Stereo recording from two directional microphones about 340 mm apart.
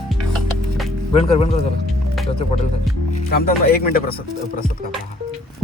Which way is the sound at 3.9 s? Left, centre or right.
Left.